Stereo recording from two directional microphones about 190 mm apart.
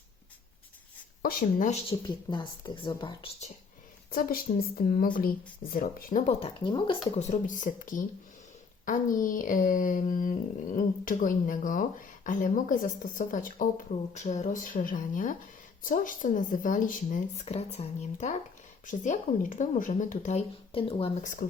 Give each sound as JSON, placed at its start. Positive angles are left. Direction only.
{"t": 1.2, "sound": "speech", "side_deg": 50}
{"t": 1.9, "sound": "a woman's voice", "side_deg": 25}
{"t": 4.1, "sound": "speech", "side_deg": 50}
{"t": 6.4, "sound": "a woman's voice", "side_deg": 25}
{"t": 7.2, "sound": "speech", "side_deg": 40}